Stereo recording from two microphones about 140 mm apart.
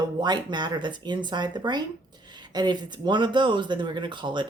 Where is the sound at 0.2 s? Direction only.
30° right (ahead or behind).